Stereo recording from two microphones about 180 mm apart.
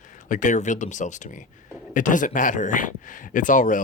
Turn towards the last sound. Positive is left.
turn(degrees=45)  # may be behind; listen again after turning